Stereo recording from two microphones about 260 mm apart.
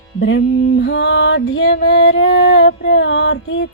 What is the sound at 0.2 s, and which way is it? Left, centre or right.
Female singing, left.